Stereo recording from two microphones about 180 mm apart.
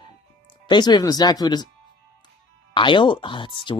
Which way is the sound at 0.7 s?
25° left (ahead or behind).